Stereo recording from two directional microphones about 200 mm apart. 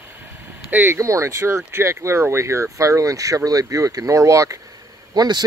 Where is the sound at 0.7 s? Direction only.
10° right (ahead or behind).